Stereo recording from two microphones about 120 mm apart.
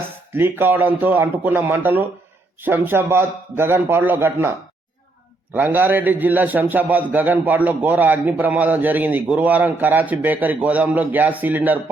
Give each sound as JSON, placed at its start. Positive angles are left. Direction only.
{"t": 0.3, "sound": "a man's voice", "side_deg": -15}
{"t": 5.5, "sound": "a man's voice", "side_deg": -15}